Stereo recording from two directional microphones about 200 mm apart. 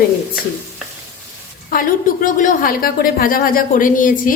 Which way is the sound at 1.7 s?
45° left (ahead or behind).